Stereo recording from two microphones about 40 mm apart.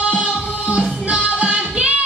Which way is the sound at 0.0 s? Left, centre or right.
Right.